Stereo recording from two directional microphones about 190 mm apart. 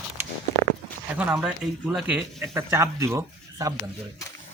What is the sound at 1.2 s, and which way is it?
Speech, 5° right (ahead or behind).